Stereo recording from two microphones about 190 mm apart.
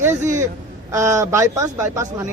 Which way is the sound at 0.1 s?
40° right (ahead or behind).